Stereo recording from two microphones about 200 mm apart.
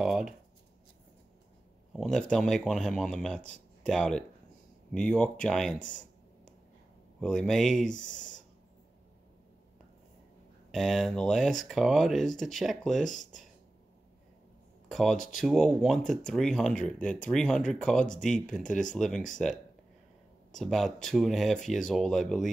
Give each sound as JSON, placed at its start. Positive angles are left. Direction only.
{"t": 0.0, "sound": "speech", "side_deg": -5}
{"t": 2.0, "sound": "speech", "side_deg": 0}
{"t": 5.8, "sound": "a sound", "side_deg": 40}
{"t": 7.2, "sound": "speech", "side_deg": 5}
{"t": 8.1, "sound": "speech", "side_deg": 40}
{"t": 10.7, "sound": "speech", "side_deg": 0}
{"t": 14.9, "sound": "speech", "side_deg": 0}